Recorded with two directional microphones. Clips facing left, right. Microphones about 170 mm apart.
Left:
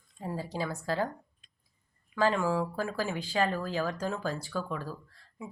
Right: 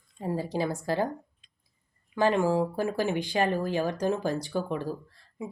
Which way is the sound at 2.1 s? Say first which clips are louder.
Right 4 dB; 20° right (ahead or behind).